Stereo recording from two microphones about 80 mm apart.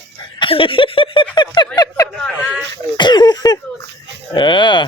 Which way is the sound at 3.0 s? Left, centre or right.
Left.